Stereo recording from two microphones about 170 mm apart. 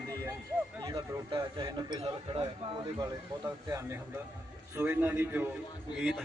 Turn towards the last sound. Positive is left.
turn(degrees=0)  # may be behind; listen again after turning